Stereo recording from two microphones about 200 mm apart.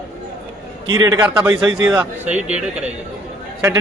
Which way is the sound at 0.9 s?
15° right (ahead or behind).